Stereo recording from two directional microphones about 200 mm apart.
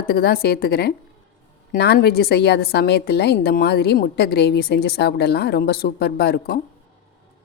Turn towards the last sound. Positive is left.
turn(degrees=55)  # may be behind; listen again after turning